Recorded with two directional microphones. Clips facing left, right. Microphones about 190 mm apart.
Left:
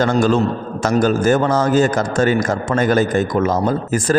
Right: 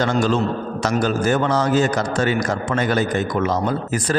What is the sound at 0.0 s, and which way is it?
A man's voice, 45° left (ahead or behind).